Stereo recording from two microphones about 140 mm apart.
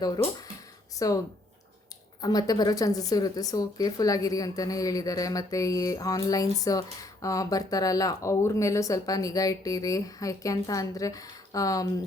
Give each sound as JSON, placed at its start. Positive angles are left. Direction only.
{"t": 0.9, "sound": "speech", "side_deg": 25}
{"t": 2.2, "sound": "speech", "side_deg": 30}